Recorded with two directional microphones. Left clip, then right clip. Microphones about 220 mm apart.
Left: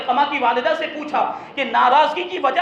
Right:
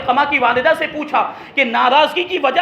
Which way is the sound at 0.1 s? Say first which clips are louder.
Right 4 dB; 40° right (ahead or behind).